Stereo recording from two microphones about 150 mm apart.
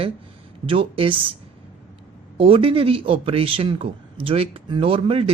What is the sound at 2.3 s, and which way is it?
A man's voice, 35° right (ahead or behind).